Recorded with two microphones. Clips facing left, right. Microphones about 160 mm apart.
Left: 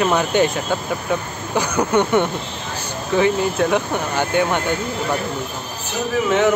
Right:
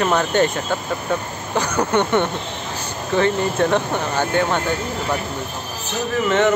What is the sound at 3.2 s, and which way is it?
Speech, 10° left (ahead or behind).